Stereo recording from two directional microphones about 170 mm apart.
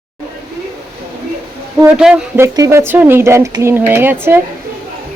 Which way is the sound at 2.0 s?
5° right (ahead or behind).